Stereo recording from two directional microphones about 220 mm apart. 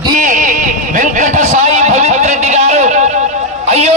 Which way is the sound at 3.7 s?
30° right (ahead or behind).